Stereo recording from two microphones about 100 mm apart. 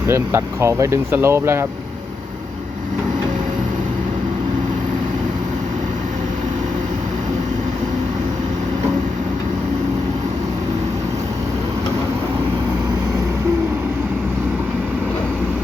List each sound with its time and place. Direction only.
0.1 s speech: 25° right (ahead or behind)